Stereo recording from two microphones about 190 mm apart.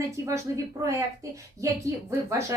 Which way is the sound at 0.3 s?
15° right (ahead or behind).